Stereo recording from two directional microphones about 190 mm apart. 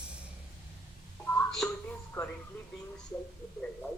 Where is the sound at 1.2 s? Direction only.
5° left (ahead or behind).